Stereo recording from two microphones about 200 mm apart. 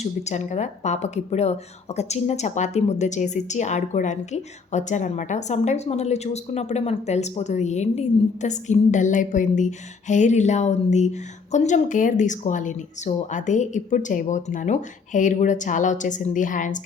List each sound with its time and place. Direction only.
0.0 s a woman's voice: 35° left (ahead or behind)